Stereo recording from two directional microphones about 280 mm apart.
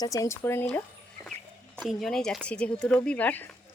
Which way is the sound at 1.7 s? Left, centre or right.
Centre.